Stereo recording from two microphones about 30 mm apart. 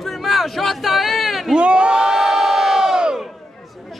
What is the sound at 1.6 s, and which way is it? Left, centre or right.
Crowd, right.